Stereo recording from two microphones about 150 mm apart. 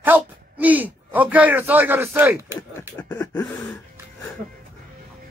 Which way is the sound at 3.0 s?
15° left (ahead or behind).